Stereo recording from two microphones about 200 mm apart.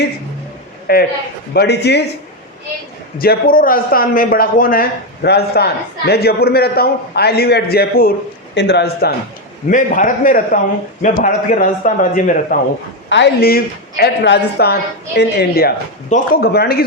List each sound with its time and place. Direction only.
0.9 s a man's voice: 50° left (ahead or behind)
3.2 s a man's voice: 45° left (ahead or behind)
9.6 s a man's voice: 40° left (ahead or behind)
13.1 s speech: 60° left (ahead or behind)